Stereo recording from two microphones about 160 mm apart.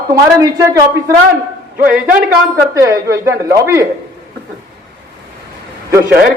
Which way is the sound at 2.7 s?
20° right (ahead or behind).